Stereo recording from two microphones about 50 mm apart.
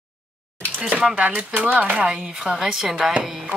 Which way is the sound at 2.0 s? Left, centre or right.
Centre.